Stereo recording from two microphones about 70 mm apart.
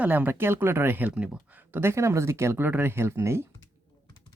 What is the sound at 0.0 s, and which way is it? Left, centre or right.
Speech, right.